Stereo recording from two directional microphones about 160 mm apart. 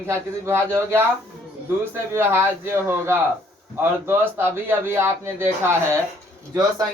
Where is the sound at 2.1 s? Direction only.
15° right (ahead or behind).